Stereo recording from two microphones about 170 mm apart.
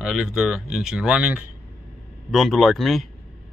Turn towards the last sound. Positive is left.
turn(degrees=0)  # may be behind; listen again after turning